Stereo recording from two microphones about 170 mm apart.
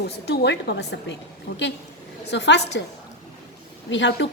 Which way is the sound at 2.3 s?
90° left.